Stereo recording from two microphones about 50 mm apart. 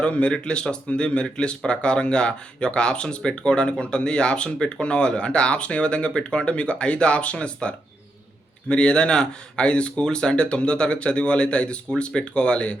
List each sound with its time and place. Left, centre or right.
0.0 s speech: left